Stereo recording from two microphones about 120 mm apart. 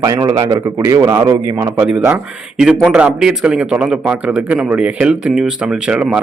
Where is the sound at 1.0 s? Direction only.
35° right (ahead or behind).